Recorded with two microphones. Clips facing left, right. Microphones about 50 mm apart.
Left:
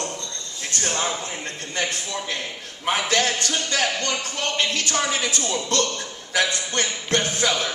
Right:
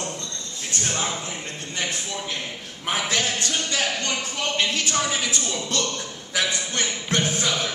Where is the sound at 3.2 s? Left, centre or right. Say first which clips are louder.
Left 2 dB; left.